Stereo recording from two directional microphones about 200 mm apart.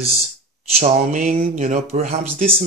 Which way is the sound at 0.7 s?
35° right (ahead or behind).